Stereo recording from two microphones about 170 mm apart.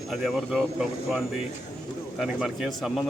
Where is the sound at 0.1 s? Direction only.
Centre (ahead or behind).